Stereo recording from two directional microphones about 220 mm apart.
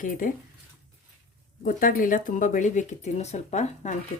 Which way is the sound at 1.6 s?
40° left (ahead or behind).